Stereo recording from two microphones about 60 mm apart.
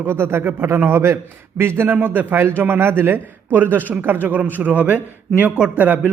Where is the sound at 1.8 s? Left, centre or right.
Right.